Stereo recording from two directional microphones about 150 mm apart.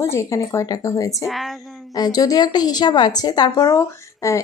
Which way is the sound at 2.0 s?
25° left (ahead or behind).